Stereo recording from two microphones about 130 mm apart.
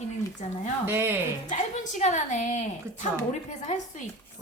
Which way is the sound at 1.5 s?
65° left (ahead or behind).